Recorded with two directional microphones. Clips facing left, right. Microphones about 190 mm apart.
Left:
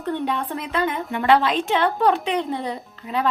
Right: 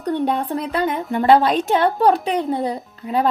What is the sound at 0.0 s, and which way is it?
A woman's voice, 45° right (ahead or behind).